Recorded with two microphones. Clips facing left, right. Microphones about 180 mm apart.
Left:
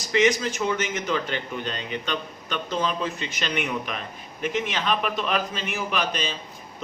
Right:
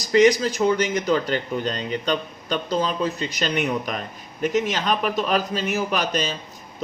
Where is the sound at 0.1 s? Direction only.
35° right (ahead or behind).